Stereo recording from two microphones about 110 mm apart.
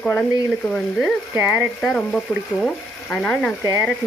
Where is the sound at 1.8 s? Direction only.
Centre (ahead or behind).